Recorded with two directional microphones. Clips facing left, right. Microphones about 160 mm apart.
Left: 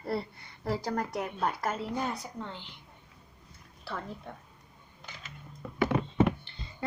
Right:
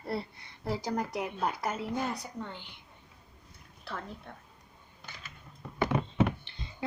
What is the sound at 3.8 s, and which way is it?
Speech, 5° left (ahead or behind).